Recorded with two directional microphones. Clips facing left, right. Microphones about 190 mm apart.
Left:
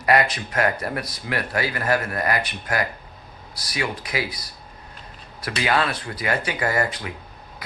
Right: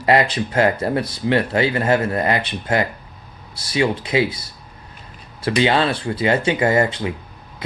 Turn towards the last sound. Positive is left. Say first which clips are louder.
# right 7 dB
turn(degrees=-25)  # may be behind; listen again after turning